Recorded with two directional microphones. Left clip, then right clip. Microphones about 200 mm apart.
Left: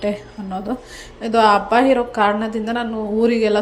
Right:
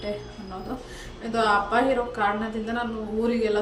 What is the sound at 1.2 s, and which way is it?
A woman's voice, 30° left (ahead or behind).